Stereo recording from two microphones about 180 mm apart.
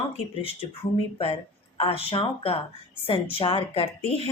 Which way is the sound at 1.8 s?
30° left (ahead or behind).